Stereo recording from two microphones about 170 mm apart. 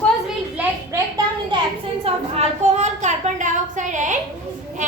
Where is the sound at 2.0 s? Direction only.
40° right (ahead or behind).